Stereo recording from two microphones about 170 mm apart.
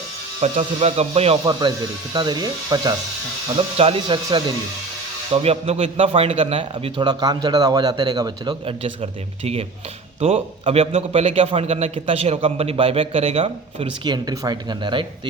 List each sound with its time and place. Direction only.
0.4 s a man's voice: 40° right (ahead or behind)
2.1 s speech: 25° right (ahead or behind)
3.8 s a man's voice: 35° right (ahead or behind)